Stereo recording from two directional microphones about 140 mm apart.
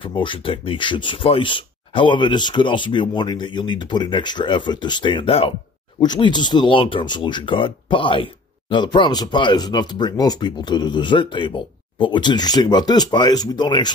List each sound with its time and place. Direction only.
0.0 s speech: 35° left (ahead or behind)